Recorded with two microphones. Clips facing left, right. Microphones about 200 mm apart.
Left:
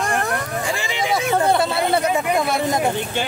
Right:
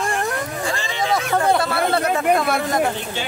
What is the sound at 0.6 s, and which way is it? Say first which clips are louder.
Speech: even; 15° left (ahead or behind).